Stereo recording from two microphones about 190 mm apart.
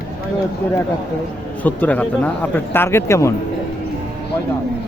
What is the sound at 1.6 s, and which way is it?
Speech, 10° left (ahead or behind).